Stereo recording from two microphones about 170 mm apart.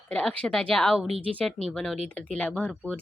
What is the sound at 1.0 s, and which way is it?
Speech, 35° right (ahead or behind).